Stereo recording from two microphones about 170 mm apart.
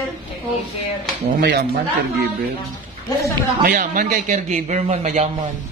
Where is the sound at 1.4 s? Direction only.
75° right (ahead or behind).